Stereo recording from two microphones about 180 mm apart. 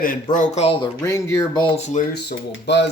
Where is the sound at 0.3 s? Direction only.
35° left (ahead or behind).